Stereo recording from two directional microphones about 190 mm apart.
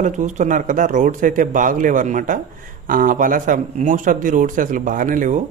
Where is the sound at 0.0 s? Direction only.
40° right (ahead or behind).